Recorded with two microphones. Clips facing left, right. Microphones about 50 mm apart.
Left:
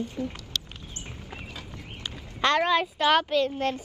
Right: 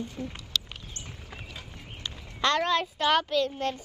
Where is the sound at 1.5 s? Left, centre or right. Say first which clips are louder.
Left 3 dB; right.